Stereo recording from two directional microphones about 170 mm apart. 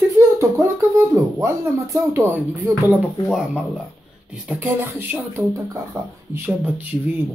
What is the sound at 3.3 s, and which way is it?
A child's voice, 5° right (ahead or behind).